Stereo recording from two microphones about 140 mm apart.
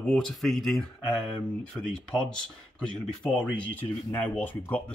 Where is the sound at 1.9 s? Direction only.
5° left (ahead or behind).